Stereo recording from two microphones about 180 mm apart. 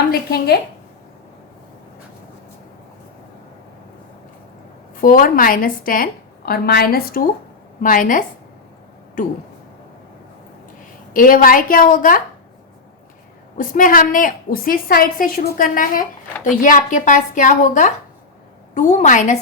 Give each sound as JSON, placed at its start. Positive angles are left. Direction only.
{"t": 0.1, "sound": "a woman's voice", "side_deg": 60}
{"t": 4.9, "sound": "a woman's voice", "side_deg": 50}
{"t": 11.1, "sound": "a woman's voice", "side_deg": 50}
{"t": 13.6, "sound": "a woman's voice", "side_deg": 50}